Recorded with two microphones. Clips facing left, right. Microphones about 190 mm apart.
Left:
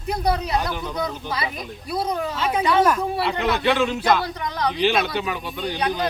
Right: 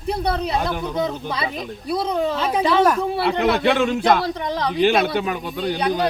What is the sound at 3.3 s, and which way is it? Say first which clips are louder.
Speech: right 4 dB; 55° right (ahead or behind).